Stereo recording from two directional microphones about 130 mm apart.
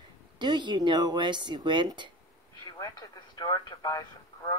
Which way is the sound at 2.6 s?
30° left (ahead or behind).